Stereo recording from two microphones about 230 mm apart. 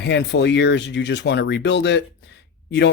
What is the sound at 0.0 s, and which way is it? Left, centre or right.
Speech, left.